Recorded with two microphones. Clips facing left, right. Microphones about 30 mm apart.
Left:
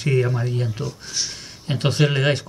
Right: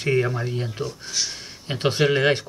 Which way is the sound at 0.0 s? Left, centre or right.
Centre.